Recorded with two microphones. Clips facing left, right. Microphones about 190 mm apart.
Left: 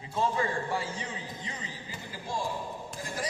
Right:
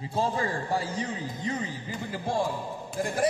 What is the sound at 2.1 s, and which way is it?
A man's voice, 60° right (ahead or behind).